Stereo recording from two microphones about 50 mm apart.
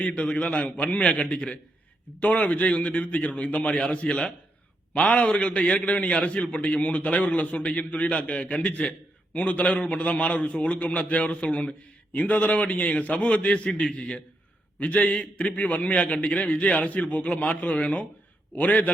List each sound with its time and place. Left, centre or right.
0.0 s a man's voice: left